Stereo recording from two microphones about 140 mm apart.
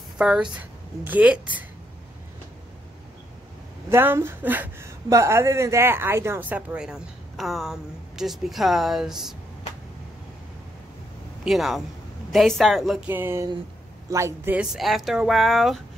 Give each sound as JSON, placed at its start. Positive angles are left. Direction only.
{"t": 0.2, "sound": "a woman's voice", "side_deg": -5}
{"t": 3.9, "sound": "a woman's voice", "side_deg": -15}
{"t": 11.4, "sound": "speech", "side_deg": 0}
{"t": 13.1, "sound": "a woman's voice", "side_deg": -15}